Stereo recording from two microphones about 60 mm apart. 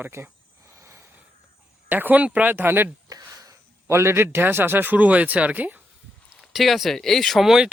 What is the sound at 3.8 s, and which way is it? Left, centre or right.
A man's voice, right.